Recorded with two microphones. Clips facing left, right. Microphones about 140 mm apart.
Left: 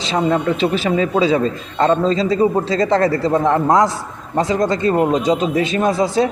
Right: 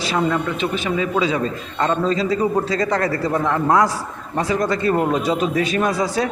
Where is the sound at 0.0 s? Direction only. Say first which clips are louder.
Left 3 dB; 25° left (ahead or behind).